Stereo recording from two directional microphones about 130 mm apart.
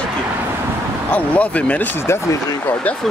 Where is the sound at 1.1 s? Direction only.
10° left (ahead or behind).